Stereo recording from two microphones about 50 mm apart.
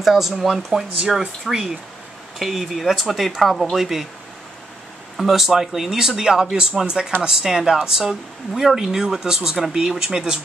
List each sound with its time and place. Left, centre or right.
0.0 s speech: centre
5.1 s speech: centre